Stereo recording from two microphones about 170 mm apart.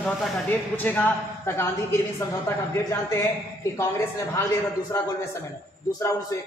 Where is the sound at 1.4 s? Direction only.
15° left (ahead or behind).